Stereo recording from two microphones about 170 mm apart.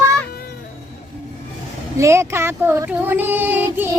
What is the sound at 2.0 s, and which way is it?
Speech, 15° right (ahead or behind).